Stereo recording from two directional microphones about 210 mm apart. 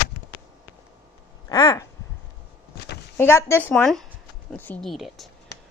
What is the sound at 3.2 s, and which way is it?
A woman's voice, 10° left (ahead or behind).